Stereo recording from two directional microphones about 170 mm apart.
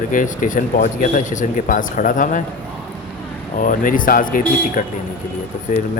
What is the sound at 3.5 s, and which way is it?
A man's voice, 50° left (ahead or behind).